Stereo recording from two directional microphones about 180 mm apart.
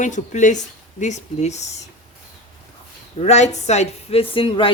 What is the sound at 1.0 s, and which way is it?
Music, 40° left (ahead or behind).